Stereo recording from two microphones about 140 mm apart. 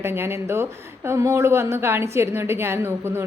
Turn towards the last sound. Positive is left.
turn(degrees=-15)  # may be behind; listen again after turning